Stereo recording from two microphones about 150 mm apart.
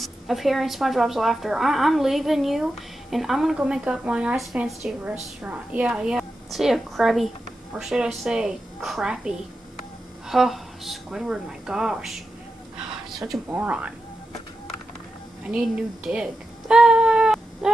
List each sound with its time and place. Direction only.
0.0 s a woman's voice: centre (ahead or behind)
13.5 s speech: 10° right (ahead or behind)
16.1 s a sound: 5° right (ahead or behind)